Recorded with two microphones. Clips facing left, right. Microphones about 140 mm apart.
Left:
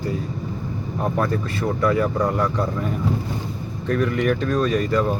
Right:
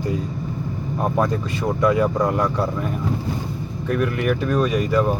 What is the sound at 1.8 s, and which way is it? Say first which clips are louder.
Speech: right 2 dB; 15° right (ahead or behind).